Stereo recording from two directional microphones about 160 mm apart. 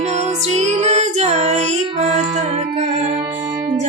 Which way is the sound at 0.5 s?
45° right (ahead or behind).